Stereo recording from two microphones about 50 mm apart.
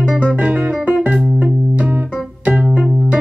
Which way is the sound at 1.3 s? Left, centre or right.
Right.